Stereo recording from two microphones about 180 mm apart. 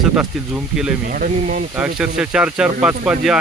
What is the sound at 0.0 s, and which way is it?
Speech, 5° right (ahead or behind).